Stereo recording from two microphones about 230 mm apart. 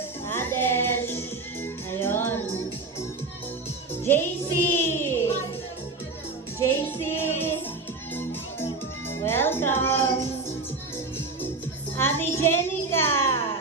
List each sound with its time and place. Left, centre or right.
0.3 s music: centre
4.0 s music: centre
4.7 s child singing: centre
6.6 s music: centre
9.0 s music: centre
11.9 s a sound: centre
13.3 s music: left